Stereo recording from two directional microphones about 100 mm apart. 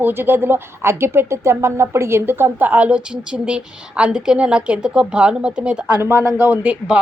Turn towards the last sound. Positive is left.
turn(degrees=-15)  # may be behind; listen again after turning